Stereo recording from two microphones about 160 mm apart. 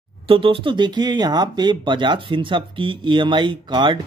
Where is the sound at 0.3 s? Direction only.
35° right (ahead or behind).